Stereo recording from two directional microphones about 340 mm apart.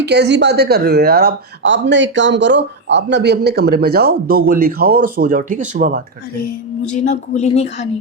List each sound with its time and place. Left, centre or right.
0.0 s speech: right
7.0 s speech: centre